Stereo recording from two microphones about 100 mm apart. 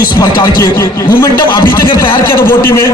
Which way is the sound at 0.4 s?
35° left (ahead or behind).